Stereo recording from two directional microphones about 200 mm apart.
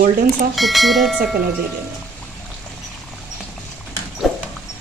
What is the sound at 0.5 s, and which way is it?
Speech, centre (ahead or behind).